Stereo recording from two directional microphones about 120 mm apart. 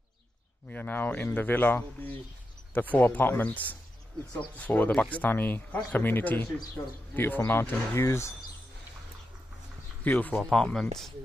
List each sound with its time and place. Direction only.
0.7 s speech: 15° left (ahead or behind)
10.0 s speech: 15° left (ahead or behind)